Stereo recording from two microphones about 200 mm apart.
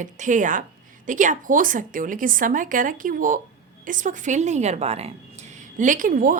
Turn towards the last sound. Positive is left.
turn(degrees=-45)  # may be behind; listen again after turning